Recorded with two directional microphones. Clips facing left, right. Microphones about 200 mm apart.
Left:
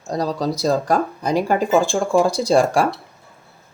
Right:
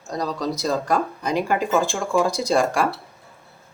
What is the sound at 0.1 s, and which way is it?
Speech, 35° left (ahead or behind).